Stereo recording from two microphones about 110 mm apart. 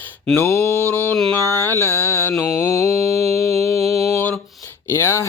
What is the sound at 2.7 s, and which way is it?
Mantra, 25° left (ahead or behind).